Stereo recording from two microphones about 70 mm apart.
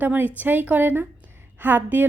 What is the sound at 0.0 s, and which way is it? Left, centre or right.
Speech, right.